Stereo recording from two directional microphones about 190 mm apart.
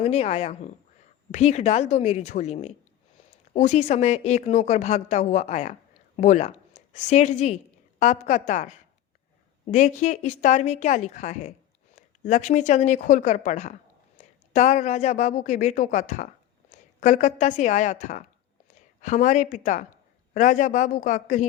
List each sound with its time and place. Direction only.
0.0 s speech: 35° left (ahead or behind)
9.7 s a woman's voice: 40° left (ahead or behind)